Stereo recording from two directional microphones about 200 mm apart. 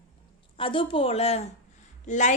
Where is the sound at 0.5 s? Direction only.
25° left (ahead or behind).